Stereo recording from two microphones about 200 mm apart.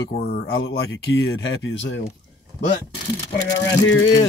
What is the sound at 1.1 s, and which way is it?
Speech, 60° left (ahead or behind).